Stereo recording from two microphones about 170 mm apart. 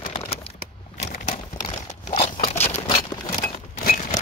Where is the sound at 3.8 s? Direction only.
55° left (ahead or behind).